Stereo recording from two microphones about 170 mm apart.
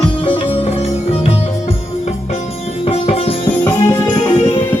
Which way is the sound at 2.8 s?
35° left (ahead or behind).